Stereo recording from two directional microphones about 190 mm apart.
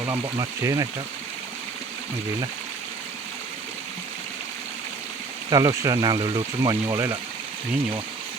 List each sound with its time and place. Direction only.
0.0 s speech: 15° right (ahead or behind)
5.5 s speech: 20° right (ahead or behind)